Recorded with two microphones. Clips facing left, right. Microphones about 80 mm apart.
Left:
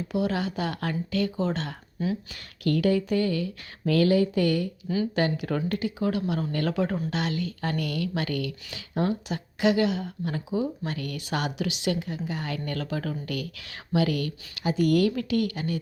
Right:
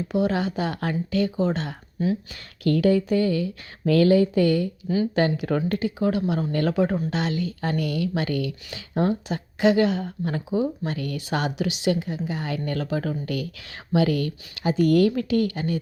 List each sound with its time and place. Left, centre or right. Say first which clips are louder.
0.1 s a woman's voice: right 4 dB; right
2.3 s a woman's voice: right 3 dB; right